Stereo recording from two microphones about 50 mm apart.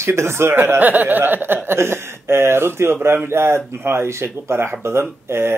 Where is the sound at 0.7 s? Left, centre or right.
Right.